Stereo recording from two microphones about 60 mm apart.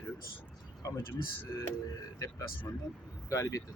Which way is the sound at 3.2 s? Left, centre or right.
Left.